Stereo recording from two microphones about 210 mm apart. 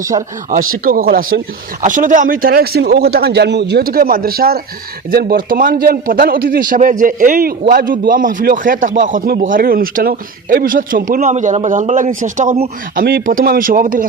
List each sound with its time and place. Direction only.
0.2 s a man's voice: 40° right (ahead or behind)